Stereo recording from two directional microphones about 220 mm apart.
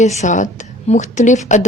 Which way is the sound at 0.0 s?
30° left (ahead or behind).